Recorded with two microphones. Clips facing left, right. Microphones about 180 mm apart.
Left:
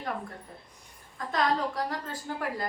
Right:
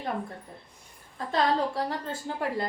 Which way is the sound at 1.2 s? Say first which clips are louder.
Right 2 dB; 30° right (ahead or behind).